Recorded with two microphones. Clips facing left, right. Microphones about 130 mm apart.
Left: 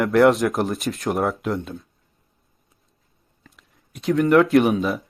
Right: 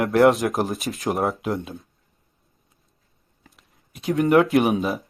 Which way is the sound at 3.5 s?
Centre (ahead or behind).